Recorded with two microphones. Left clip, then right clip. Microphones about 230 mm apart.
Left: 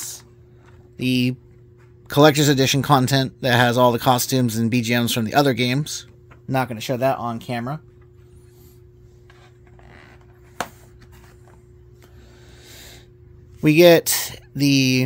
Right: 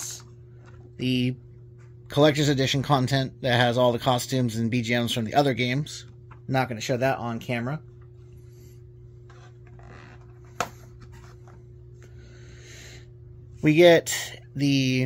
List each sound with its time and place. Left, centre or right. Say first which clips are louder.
0.9 s a man's voice: left 5 dB; left
12.6 s music: left 3 dB; left
13.6 s a man's voice: left 4 dB; left